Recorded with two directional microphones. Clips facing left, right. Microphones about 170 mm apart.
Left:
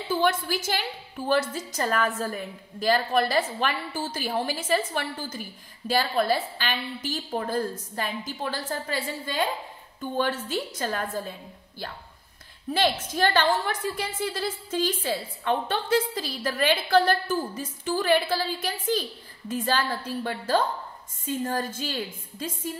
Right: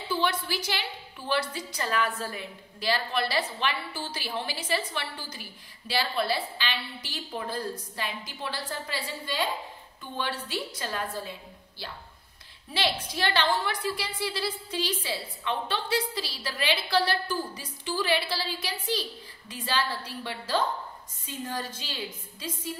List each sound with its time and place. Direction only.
0.1 s a woman's voice: 45° left (ahead or behind)
12.7 s a woman's voice: 45° left (ahead or behind)